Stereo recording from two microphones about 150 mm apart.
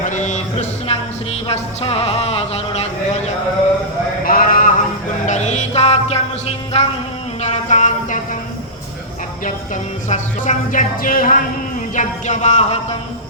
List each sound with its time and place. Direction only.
0.0 s music: 55° left (ahead or behind)
4.2 s sheep: 70° left (ahead or behind)
5.2 s music: 50° left (ahead or behind)
7.4 s a sound: 50° left (ahead or behind)
10.1 s speech: 55° left (ahead or behind)
11.9 s a man's voice: 55° left (ahead or behind)